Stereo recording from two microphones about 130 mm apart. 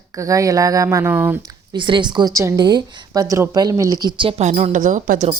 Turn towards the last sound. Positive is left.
turn(degrees=-85)